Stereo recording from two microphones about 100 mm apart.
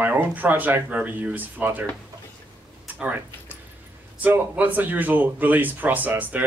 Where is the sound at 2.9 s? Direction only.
15° right (ahead or behind).